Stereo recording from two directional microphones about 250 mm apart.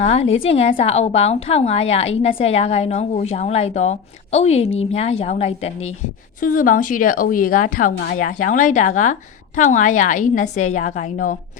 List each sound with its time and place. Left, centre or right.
0.0 s a woman's voice: left